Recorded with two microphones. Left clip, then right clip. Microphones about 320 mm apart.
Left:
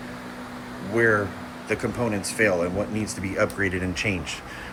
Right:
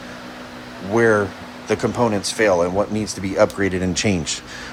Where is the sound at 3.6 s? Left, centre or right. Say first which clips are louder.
Right 4 dB; right.